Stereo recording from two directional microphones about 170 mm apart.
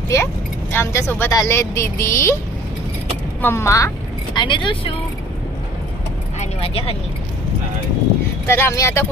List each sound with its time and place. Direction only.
0.1 s speech: 15° left (ahead or behind)
3.3 s speech: 15° left (ahead or behind)
4.4 s speech: 30° left (ahead or behind)
6.4 s speech: 35° left (ahead or behind)
8.5 s speech: 15° left (ahead or behind)